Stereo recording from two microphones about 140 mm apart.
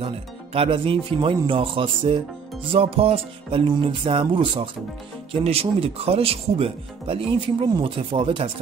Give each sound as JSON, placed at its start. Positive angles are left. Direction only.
{"t": 0.0, "sound": "speech", "side_deg": -40}